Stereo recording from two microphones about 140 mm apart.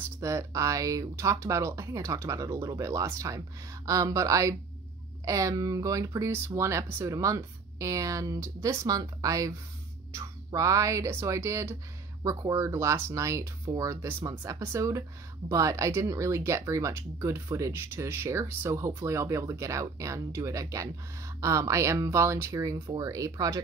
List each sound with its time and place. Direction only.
0.2 s speech: 20° right (ahead or behind)